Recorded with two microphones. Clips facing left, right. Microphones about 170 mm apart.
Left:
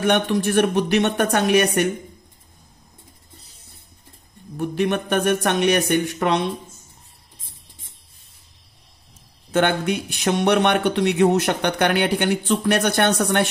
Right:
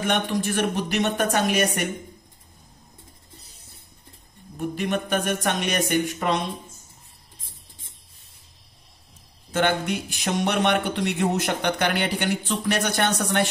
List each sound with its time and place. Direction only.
0.0 s speech: 65° left (ahead or behind)
4.6 s speech: 60° left (ahead or behind)
9.5 s speech: 60° left (ahead or behind)